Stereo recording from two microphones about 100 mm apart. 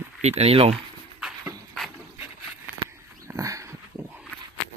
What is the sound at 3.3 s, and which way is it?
Dog, 30° right (ahead or behind).